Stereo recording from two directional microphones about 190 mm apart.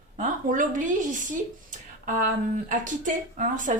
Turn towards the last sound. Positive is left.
turn(degrees=-45)  # may be behind; listen again after turning